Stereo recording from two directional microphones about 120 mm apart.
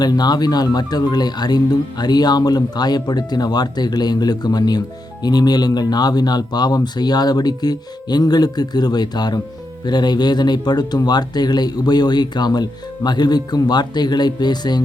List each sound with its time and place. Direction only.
0.0 s speech: 35° left (ahead or behind)